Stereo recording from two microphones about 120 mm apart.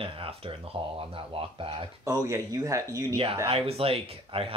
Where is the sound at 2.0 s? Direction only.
25° right (ahead or behind).